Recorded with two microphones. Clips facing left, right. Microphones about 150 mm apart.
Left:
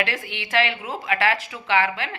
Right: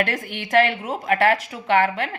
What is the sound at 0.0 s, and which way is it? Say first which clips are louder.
A woman's voice: right 3 dB; 45° right (ahead or behind).